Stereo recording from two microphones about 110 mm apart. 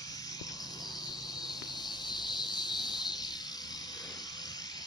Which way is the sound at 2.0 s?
45° left (ahead or behind).